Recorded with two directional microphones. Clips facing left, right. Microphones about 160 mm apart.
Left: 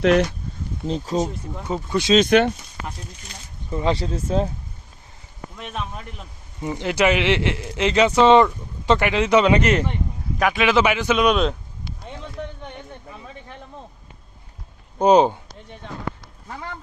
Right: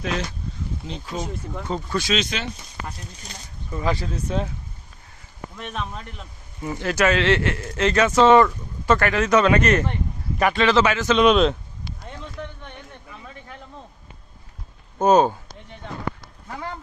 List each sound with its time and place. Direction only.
0.0 s speech: 65° left (ahead or behind)
0.9 s speech: 40° left (ahead or behind)
1.6 s speech: 15° left (ahead or behind)
2.1 s speech: 55° left (ahead or behind)
3.7 s speech: 25° left (ahead or behind)
5.5 s speech: 5° left (ahead or behind)
6.6 s speech: 20° left (ahead or behind)
10.3 s speech: centre (ahead or behind)
11.2 s speech: centre (ahead or behind)
14.9 s speech: 15° left (ahead or behind)